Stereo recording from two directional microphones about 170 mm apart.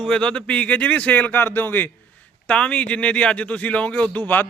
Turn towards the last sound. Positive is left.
turn(degrees=10)  # may be behind; listen again after turning